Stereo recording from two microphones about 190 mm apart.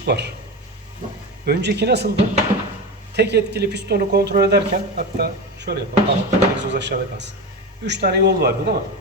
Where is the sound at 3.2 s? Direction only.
60° right (ahead or behind).